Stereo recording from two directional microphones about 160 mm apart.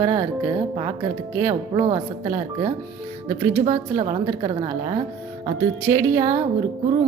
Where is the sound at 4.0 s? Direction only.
35° right (ahead or behind).